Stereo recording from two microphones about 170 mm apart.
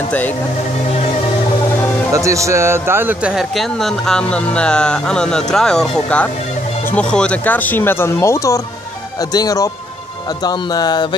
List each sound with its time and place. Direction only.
2.1 s speech: 20° right (ahead or behind); by 11.1 s 25° left (ahead or behind)